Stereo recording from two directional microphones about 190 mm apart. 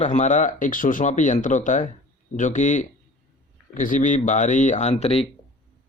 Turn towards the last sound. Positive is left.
turn(degrees=35)  # may be behind; listen again after turning